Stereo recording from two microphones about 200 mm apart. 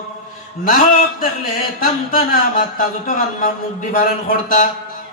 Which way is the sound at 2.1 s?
45° left (ahead or behind).